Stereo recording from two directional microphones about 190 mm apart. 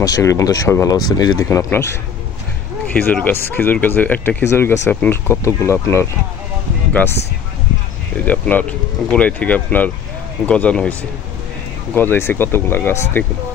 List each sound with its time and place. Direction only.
0.0 s speech: 20° left (ahead or behind)
2.9 s speech: 10° left (ahead or behind)
8.3 s speech: 10° left (ahead or behind)